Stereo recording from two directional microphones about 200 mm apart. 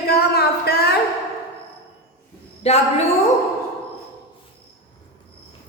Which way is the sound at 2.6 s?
30° left (ahead or behind).